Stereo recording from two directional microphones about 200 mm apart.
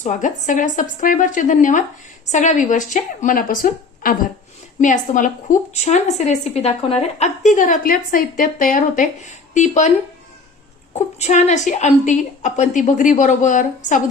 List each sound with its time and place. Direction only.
0.0 s a woman's voice: 40° left (ahead or behind)
10.9 s a woman's voice: 35° left (ahead or behind)